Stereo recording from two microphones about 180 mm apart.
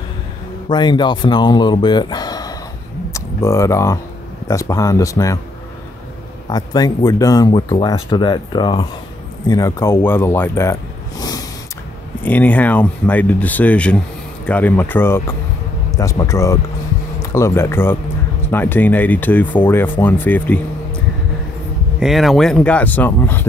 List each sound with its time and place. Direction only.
0.7 s speech: 25° left (ahead or behind)
6.5 s speech: 20° left (ahead or behind)
12.3 s speech: 10° left (ahead or behind)
22.0 s speech: centre (ahead or behind)